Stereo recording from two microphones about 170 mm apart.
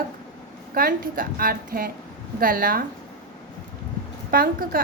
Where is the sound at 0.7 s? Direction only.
60° right (ahead or behind).